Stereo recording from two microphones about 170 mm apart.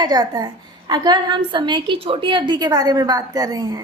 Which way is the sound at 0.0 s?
25° right (ahead or behind).